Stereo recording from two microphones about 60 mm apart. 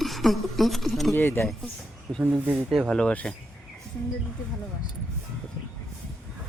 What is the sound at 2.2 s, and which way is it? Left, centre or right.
Speech, right.